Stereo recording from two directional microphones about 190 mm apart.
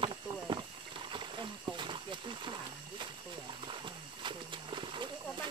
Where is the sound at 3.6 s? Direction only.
25° right (ahead or behind).